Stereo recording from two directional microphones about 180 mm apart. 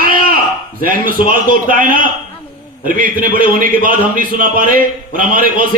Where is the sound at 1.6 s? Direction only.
50° right (ahead or behind).